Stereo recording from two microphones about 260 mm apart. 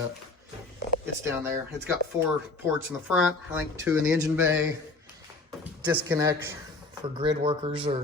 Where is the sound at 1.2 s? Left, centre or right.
Centre.